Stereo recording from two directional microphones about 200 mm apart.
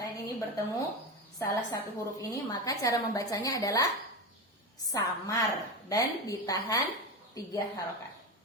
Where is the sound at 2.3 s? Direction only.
15° left (ahead or behind).